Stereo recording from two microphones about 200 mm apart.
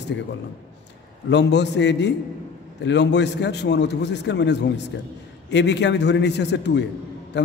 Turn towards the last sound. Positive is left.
turn(degrees=60)  # may be behind; listen again after turning